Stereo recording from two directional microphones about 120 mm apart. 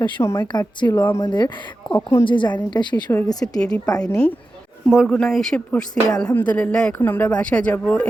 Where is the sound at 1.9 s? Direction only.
25° left (ahead or behind).